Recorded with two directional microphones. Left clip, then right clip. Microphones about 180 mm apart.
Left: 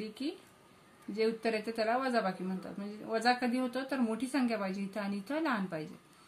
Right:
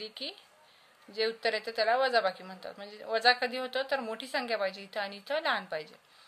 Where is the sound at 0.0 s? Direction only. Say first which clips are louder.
Even; 45° right (ahead or behind).